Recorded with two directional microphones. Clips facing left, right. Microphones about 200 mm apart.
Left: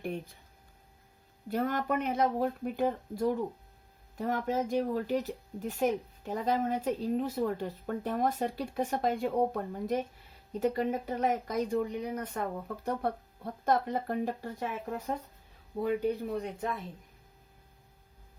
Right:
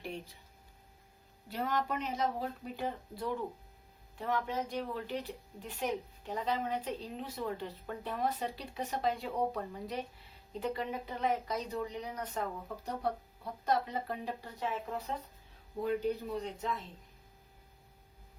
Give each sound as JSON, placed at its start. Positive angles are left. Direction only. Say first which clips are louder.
{"t": 0.0, "sound": "speech", "louder": "left 6 dB", "side_deg": 50}
{"t": 1.5, "sound": "speech", "louder": "left 4 dB", "side_deg": 50}
{"t": 16.3, "sound": "speech", "louder": "left 3 dB", "side_deg": 55}